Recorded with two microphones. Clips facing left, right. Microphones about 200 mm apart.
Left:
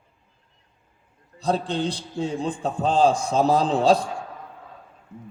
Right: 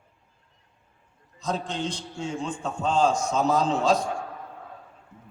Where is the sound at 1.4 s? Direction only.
35° left (ahead or behind).